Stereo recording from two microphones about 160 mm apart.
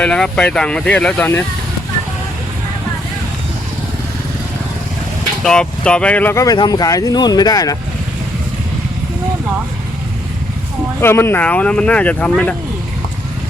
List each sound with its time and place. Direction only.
0.0 s speech: 5° left (ahead or behind)
5.4 s speech: 5° left (ahead or behind); by 7.8 s 25° left (ahead or behind)
11.0 s speech: 15° left (ahead or behind)